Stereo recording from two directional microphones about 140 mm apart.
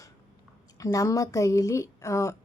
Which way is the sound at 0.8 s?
25° left (ahead or behind).